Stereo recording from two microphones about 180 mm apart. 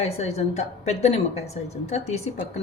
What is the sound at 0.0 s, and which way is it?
A woman's voice, 35° left (ahead or behind).